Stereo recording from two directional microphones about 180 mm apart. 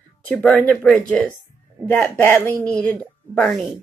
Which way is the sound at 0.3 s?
5° left (ahead or behind).